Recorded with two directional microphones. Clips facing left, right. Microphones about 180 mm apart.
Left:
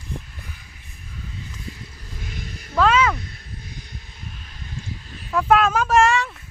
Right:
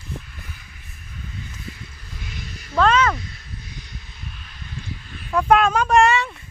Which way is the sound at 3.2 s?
50° left (ahead or behind).